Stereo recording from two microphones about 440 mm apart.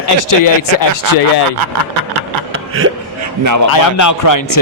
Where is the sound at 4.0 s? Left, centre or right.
Left.